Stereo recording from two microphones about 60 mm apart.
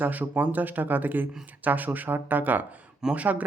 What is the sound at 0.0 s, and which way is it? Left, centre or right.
Speech, right.